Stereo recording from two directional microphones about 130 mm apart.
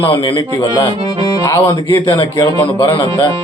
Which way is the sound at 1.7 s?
40° left (ahead or behind).